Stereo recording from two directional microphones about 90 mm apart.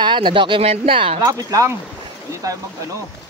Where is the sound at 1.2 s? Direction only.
40° right (ahead or behind).